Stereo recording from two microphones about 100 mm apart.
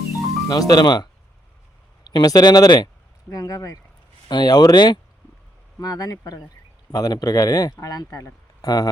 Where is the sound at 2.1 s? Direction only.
40° left (ahead or behind).